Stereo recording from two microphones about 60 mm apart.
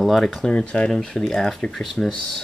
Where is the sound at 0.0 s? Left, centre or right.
Centre.